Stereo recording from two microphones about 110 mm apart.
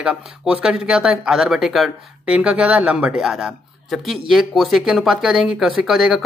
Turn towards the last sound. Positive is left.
turn(degrees=-5)  # may be behind; listen again after turning